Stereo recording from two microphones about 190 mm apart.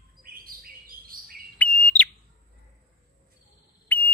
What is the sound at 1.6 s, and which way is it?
Bird, 5° left (ahead or behind).